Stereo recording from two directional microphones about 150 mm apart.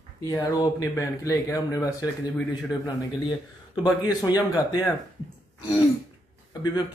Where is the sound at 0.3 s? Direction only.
25° left (ahead or behind).